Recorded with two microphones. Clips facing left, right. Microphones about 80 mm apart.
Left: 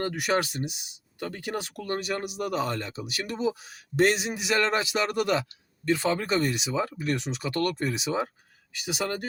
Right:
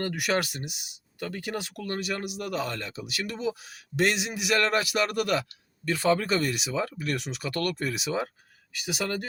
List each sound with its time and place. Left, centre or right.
0.0 s speech: left